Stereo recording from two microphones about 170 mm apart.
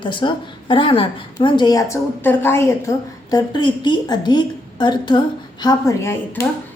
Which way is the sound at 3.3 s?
25° left (ahead or behind).